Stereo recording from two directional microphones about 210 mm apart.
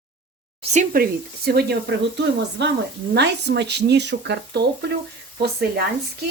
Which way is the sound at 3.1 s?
55° right (ahead or behind).